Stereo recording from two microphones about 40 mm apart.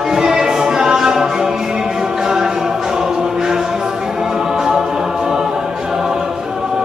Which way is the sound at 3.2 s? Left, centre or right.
Centre.